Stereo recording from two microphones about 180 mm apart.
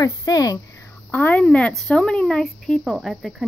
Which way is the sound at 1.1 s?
10° left (ahead or behind).